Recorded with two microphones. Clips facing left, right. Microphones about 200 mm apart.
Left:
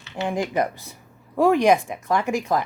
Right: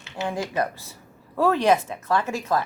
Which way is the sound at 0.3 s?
15° left (ahead or behind).